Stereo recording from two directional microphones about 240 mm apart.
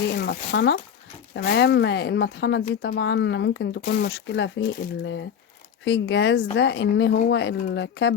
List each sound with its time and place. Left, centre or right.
0.1 s speech: left